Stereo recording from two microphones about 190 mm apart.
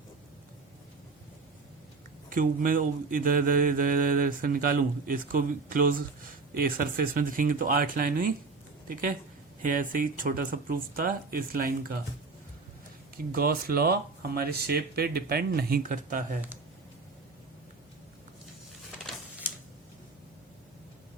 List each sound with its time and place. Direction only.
2.3 s mantra: 45° right (ahead or behind)
13.3 s mantra: 50° right (ahead or behind)